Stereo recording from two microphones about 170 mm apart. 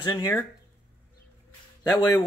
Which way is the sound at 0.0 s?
25° left (ahead or behind).